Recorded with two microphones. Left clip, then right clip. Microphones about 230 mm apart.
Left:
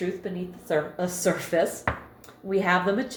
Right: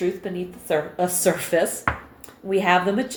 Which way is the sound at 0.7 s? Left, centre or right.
Right.